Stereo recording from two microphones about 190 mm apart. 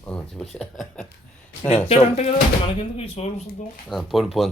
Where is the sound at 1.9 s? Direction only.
35° left (ahead or behind).